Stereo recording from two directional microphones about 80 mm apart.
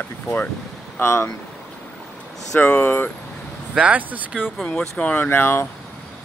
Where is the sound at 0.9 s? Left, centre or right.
Left.